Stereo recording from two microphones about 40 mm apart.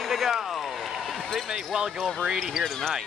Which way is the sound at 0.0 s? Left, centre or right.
Centre.